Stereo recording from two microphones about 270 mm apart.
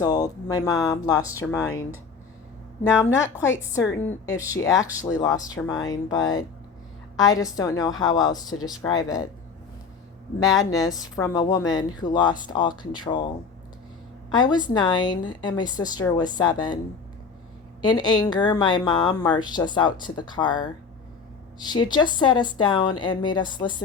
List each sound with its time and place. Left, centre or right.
0.0 s speech: centre
3.7 s speech: centre
10.4 s speech: centre
14.3 s speech: centre
17.8 s speech: centre